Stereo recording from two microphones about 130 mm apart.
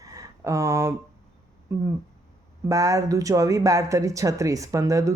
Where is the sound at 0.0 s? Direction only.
25° right (ahead or behind).